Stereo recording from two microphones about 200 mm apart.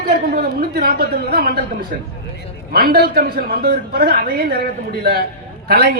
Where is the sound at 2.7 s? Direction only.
50° right (ahead or behind).